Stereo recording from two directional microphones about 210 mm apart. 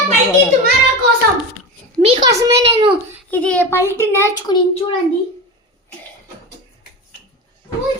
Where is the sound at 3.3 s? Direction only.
5° left (ahead or behind).